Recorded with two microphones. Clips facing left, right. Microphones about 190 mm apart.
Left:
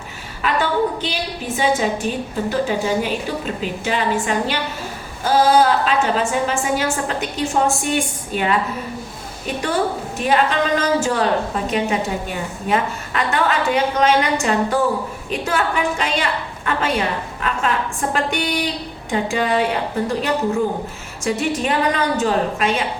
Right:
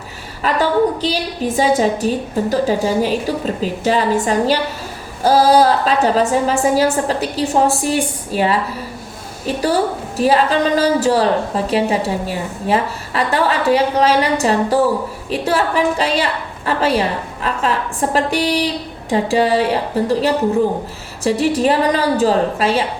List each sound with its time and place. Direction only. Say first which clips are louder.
0.4 s a woman's voice: right 4 dB; 35° right (ahead or behind)
10.2 s a woman's voice: right 4 dB; 35° right (ahead or behind)